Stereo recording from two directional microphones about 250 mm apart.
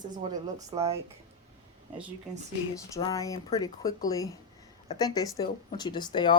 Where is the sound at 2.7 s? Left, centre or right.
Centre.